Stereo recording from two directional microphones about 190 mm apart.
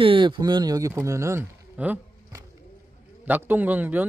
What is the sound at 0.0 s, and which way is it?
A man's voice, 25° right (ahead or behind).